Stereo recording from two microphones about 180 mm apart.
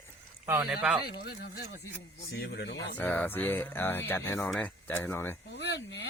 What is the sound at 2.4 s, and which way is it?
Speech, 70° left (ahead or behind).